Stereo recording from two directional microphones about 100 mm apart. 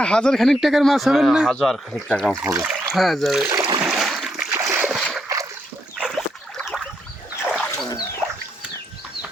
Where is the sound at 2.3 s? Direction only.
25° right (ahead or behind).